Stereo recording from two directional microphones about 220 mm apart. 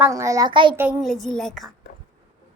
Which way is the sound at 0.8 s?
Centre (ahead or behind).